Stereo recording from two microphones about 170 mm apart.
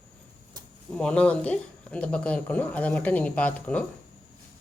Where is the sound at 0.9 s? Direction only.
5° left (ahead or behind).